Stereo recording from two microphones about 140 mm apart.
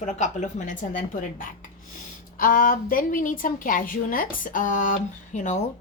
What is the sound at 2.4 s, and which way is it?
A woman's voice, 90° left.